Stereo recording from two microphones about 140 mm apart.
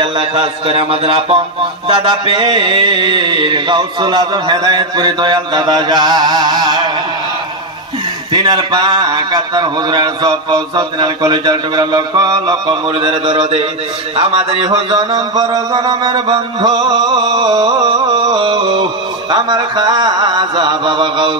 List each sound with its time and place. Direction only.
0.0 s a man's voice: 45° right (ahead or behind)
8.3 s a man's voice: 30° right (ahead or behind)